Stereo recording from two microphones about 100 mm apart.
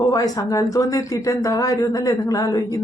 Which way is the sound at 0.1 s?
35° left (ahead or behind).